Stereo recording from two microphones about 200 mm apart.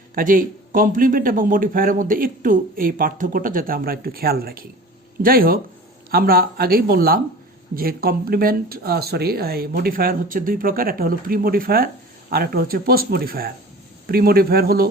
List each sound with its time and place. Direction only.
0.1 s a man's voice: 45° right (ahead or behind)